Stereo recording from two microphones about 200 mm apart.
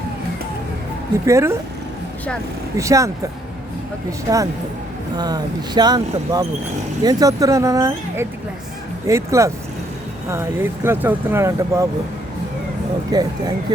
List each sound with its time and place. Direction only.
1.2 s speech: 15° right (ahead or behind)
2.7 s speech: 15° right (ahead or behind)
4.3 s speech: 20° right (ahead or behind)
13.1 s speech: 20° right (ahead or behind)